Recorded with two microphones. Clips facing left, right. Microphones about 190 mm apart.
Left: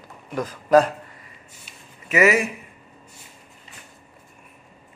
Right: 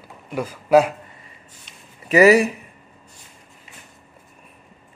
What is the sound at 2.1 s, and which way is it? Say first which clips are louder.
Speech: right 6 dB; 35° right (ahead or behind).